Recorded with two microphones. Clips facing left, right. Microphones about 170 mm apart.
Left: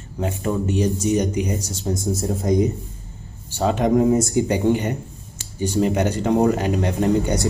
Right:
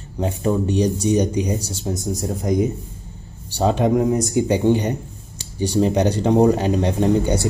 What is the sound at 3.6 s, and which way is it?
Speech, 20° right (ahead or behind).